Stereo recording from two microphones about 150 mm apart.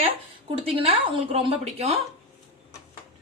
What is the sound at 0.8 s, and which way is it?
A woman's voice, 40° right (ahead or behind).